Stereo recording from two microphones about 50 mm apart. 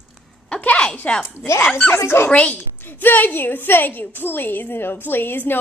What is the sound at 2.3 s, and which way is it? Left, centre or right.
Speech, left.